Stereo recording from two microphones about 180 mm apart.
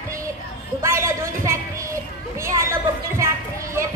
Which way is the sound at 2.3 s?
15° right (ahead or behind).